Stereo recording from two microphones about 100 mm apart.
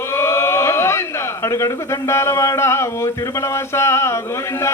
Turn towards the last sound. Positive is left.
turn(degrees=25)  # may be behind; listen again after turning